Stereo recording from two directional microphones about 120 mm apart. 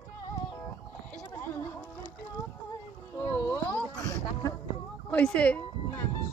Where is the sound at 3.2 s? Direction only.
15° left (ahead or behind).